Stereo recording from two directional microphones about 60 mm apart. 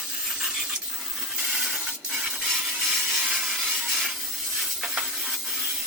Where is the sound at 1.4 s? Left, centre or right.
Centre.